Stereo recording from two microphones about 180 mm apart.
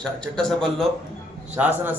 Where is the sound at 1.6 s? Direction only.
10° right (ahead or behind).